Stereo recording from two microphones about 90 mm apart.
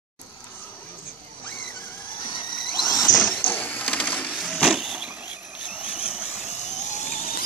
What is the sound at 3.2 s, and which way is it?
Sewing machine, 15° left (ahead or behind).